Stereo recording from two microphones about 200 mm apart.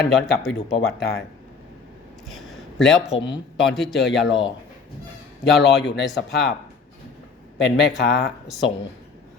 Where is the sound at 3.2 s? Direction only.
20° left (ahead or behind).